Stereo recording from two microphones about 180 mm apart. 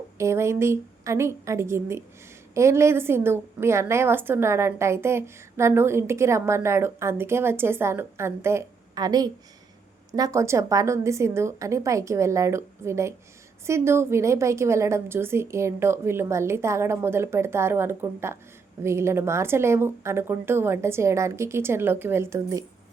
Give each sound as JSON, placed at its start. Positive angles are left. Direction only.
{"t": 0.2, "sound": "a woman's voice", "side_deg": -15}